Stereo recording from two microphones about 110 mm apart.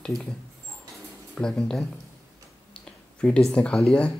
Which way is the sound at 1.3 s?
10° left (ahead or behind).